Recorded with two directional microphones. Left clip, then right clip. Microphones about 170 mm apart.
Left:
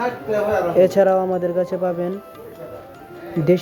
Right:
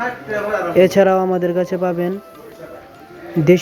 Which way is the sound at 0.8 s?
30° right (ahead or behind).